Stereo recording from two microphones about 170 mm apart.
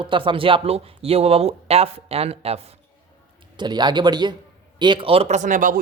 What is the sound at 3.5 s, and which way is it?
A man's voice, 25° right (ahead or behind).